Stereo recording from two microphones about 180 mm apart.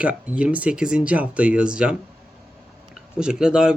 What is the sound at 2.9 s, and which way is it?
Speech, 5° right (ahead or behind).